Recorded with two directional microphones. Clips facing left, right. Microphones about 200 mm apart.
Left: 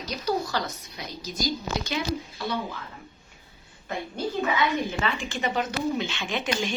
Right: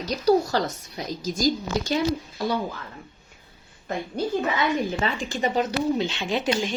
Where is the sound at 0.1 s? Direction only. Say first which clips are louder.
Right 7 dB; 40° right (ahead or behind).